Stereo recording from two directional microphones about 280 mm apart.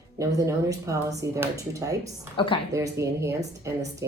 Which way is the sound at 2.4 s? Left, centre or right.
Centre.